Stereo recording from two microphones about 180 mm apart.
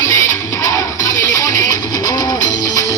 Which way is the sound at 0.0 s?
15° left (ahead or behind).